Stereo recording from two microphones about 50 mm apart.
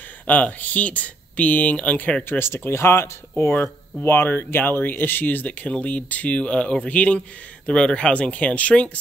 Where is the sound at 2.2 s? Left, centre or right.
Left.